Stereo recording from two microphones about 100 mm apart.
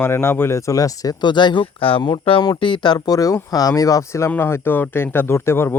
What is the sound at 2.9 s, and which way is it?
Speech, 35° left (ahead or behind).